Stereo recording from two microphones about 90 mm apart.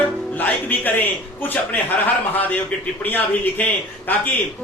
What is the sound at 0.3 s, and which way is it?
A man's voice, 20° left (ahead or behind).